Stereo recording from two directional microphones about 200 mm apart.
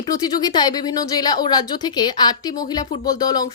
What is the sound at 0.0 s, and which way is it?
A woman's voice, 20° left (ahead or behind).